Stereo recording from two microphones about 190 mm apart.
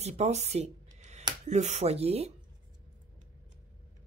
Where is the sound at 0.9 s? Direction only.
35° right (ahead or behind).